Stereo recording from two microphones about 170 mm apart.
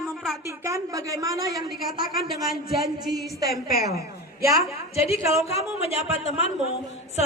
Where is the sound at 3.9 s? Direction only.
20° right (ahead or behind).